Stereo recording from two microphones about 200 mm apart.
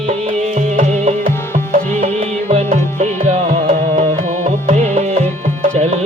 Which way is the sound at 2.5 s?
35° right (ahead or behind).